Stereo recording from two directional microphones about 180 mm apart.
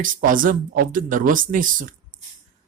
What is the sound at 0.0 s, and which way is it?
Speech, 50° right (ahead or behind).